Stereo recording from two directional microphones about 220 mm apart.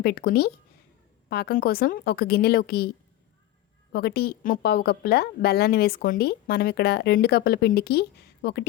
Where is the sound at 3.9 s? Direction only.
45° left (ahead or behind).